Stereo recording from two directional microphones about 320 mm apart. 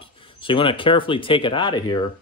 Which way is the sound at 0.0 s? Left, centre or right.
Centre.